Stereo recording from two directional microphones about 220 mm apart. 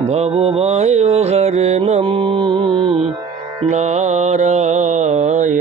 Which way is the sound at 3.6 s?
30° right (ahead or behind).